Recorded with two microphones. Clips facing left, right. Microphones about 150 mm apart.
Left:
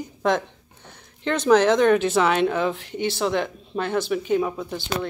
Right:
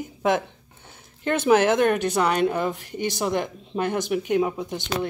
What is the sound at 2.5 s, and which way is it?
Speech, 10° right (ahead or behind).